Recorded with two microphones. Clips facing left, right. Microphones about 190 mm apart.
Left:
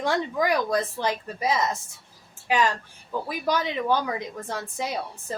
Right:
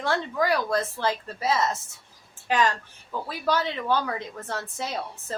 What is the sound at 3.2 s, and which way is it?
A woman's voice, 15° left (ahead or behind).